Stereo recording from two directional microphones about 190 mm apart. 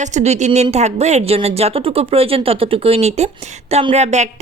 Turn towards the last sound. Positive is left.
turn(degrees=-35)  # may be behind; listen again after turning